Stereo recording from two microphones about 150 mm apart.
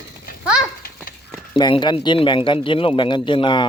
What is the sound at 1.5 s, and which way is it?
Speech, 30° left (ahead or behind).